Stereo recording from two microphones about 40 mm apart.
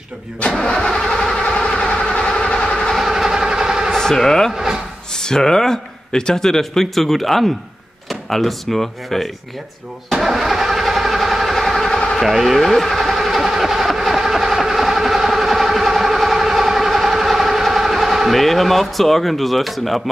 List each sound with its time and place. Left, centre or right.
0.7 s vehicle: centre
1.4 s train: centre
3.0 s vehicle: centre
3.9 s speech: centre
4.5 s a sound: centre
5.1 s speech: centre
10.1 s engine starting: centre
12.2 s vehicle: centre